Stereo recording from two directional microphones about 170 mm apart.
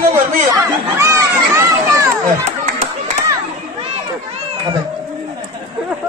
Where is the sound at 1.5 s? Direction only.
20° right (ahead or behind).